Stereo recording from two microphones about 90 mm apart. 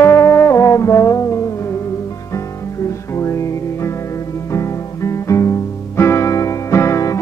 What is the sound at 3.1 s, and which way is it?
Music, 30° left (ahead or behind).